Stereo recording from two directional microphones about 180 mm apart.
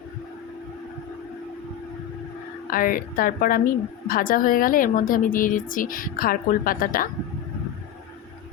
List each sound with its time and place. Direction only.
2.6 s a woman's voice: 50° left (ahead or behind)